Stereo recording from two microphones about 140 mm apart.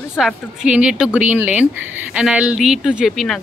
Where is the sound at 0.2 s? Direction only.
5° right (ahead or behind).